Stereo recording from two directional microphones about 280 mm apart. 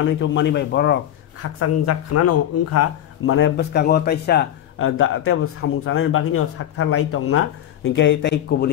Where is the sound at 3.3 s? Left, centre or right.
Left.